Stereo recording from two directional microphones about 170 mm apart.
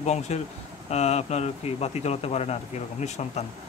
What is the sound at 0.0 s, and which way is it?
Speech, 40° left (ahead or behind).